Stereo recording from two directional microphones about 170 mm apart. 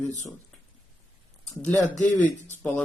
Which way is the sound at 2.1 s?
45° left (ahead or behind).